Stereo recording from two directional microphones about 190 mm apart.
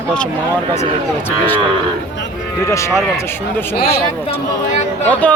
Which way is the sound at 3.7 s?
55° left (ahead or behind).